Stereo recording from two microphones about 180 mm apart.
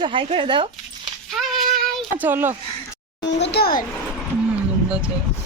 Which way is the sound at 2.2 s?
10° right (ahead or behind).